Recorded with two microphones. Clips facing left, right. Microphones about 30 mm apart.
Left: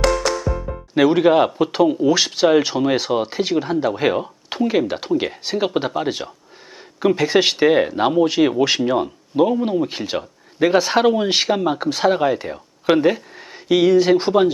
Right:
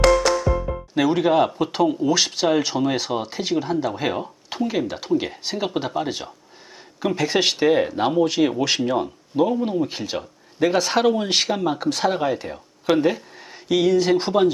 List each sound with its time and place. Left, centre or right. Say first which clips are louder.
0.0 s music: right 2 dB; centre
0.9 s speech: left 4 dB; centre
7.6 s speech: left 3 dB; centre